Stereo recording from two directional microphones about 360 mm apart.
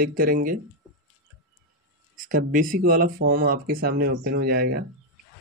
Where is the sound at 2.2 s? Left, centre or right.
Right.